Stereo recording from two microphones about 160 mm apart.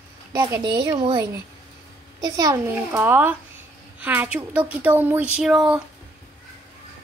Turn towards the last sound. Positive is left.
turn(degrees=-5)  # may be behind; listen again after turning